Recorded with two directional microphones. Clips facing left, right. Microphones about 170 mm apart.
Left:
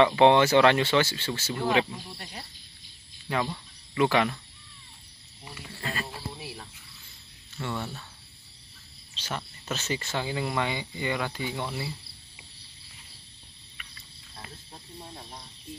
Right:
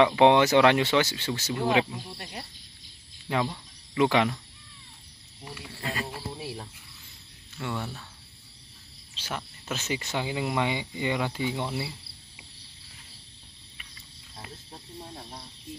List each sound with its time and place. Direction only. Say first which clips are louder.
0.0 s speech: even; 15° right (ahead or behind)
5.8 s wild animals: right 1 dB; 15° right (ahead or behind)
7.5 s speech: even; 5° right (ahead or behind)
9.1 s speech: even; 10° right (ahead or behind)
14.3 s speech: right 2 dB; 10° right (ahead or behind)